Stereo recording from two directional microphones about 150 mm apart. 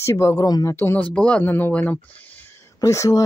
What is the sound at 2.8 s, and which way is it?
Speech, 20° left (ahead or behind).